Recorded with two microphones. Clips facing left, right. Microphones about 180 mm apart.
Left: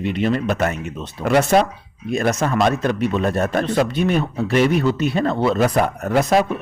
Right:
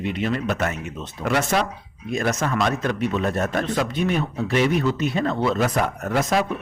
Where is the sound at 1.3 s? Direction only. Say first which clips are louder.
Left 7 dB; 45° left (ahead or behind).